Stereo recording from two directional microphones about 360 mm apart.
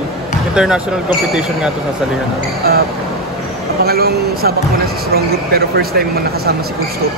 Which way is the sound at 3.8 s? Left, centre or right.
Right.